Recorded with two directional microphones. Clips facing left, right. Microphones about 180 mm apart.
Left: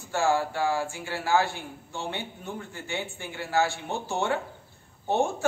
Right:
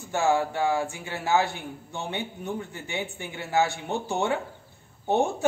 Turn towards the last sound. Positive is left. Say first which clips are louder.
# right 2 dB
turn(degrees=-20)  # may be behind; listen again after turning